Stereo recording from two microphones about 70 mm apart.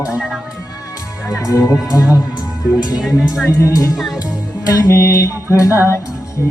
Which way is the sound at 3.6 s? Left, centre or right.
Left.